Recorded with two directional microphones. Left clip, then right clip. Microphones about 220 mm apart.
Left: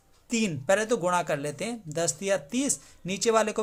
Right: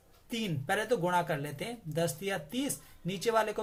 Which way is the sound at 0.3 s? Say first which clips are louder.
Left 8 dB; 40° left (ahead or behind).